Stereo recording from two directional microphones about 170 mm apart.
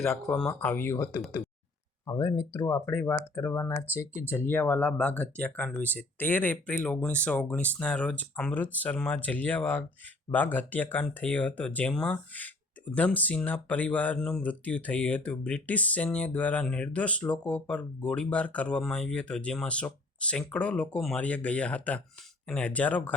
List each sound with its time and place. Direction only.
0.0 s speech: 5° left (ahead or behind)